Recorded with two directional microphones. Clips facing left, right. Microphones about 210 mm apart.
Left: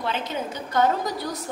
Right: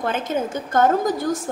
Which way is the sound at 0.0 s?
50° right (ahead or behind).